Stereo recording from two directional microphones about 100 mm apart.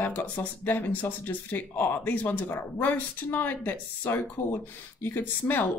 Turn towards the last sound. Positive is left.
turn(degrees=20)  # may be behind; listen again after turning